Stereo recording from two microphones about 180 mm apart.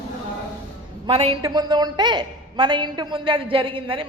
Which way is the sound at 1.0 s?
30° right (ahead or behind).